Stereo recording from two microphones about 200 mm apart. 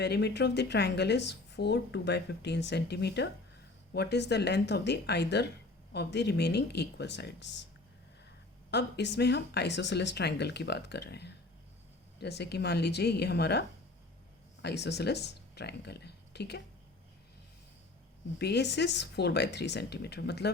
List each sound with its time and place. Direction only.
0.0 s speech: 55° left (ahead or behind)
8.7 s speech: 60° left (ahead or behind)
18.3 s speech: 55° left (ahead or behind)